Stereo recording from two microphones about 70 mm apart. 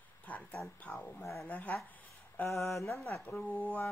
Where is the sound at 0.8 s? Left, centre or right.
Centre.